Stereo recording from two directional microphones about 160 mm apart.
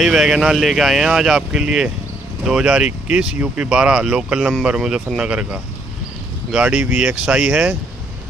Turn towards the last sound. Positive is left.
turn(degrees=-5)  # may be behind; listen again after turning